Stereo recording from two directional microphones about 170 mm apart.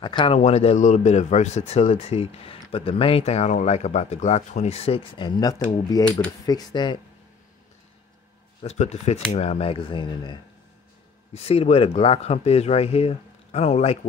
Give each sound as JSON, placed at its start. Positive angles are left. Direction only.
{"t": 0.0, "sound": "speech", "side_deg": 30}
{"t": 8.6, "sound": "speech", "side_deg": 40}